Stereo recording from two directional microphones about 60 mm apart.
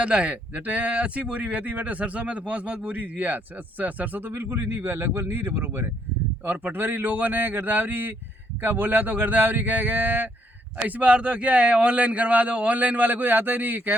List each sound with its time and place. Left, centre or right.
0.0 s a man's voice: centre